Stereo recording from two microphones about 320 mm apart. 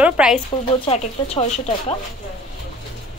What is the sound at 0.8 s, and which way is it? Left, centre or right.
Speech, centre.